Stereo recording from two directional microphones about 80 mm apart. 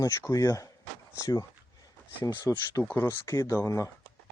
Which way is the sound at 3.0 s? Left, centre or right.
Left.